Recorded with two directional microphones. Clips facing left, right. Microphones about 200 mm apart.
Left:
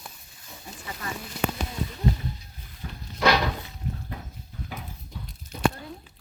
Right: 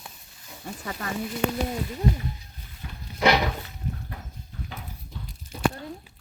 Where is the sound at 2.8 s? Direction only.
40° left (ahead or behind).